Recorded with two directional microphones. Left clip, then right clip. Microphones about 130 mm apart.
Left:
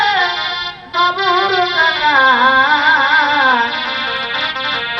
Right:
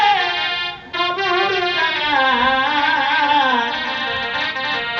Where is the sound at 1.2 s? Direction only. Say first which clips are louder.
Left 4 dB; 60° right (ahead or behind).